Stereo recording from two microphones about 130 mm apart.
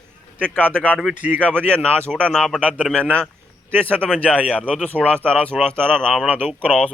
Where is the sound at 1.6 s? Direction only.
10° left (ahead or behind).